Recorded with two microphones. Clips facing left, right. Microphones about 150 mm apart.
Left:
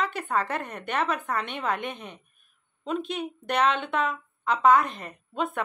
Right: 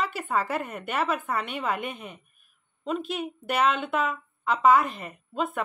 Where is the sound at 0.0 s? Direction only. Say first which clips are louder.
Even; 5° right (ahead or behind).